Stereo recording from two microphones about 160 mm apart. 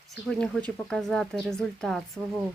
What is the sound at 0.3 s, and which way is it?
Speech, 5° left (ahead or behind).